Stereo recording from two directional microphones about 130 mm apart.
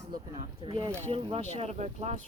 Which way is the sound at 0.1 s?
40° right (ahead or behind).